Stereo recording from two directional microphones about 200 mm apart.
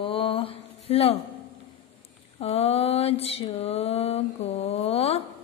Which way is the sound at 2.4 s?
30° left (ahead or behind).